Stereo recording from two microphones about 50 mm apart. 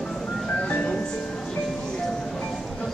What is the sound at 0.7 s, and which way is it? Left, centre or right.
Music, left.